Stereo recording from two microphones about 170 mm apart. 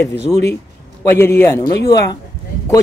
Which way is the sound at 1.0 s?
15° left (ahead or behind).